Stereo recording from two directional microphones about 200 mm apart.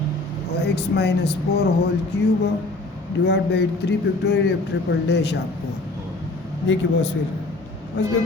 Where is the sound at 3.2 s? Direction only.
55° left (ahead or behind).